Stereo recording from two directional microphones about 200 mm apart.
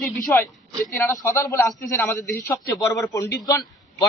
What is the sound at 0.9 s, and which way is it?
A man's voice, 10° left (ahead or behind).